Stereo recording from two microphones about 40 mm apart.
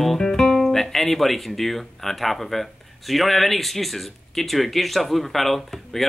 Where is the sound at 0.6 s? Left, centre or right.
Centre.